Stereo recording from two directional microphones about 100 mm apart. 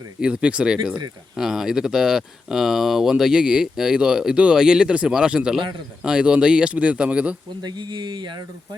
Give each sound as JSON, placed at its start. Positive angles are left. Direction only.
{"t": 0.2, "sound": "speech", "side_deg": -10}
{"t": 7.6, "sound": "speech", "side_deg": -45}